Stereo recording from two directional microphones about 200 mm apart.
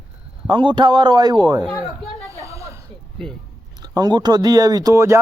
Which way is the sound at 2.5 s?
15° right (ahead or behind).